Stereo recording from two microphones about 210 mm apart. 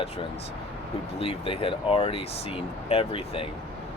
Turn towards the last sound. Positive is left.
turn(degrees=25)  # may be behind; listen again after turning